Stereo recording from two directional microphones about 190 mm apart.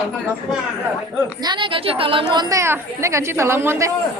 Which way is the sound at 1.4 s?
25° right (ahead or behind).